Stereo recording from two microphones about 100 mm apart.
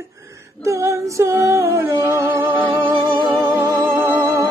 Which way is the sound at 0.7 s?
30° right (ahead or behind).